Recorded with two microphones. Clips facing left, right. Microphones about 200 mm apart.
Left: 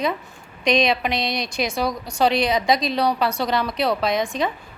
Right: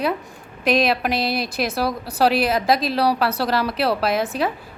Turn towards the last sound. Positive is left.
turn(degrees=-5)  # may be behind; listen again after turning